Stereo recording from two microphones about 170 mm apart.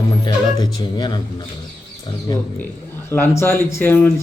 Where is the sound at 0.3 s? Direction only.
25° left (ahead or behind).